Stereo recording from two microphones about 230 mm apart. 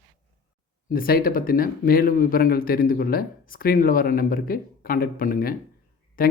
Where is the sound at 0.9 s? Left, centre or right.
Left.